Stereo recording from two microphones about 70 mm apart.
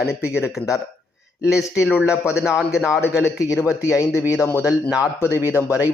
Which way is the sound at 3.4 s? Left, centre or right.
Left.